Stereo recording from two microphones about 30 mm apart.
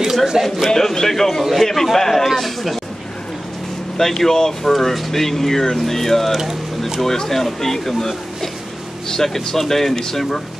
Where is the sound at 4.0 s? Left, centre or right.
Centre.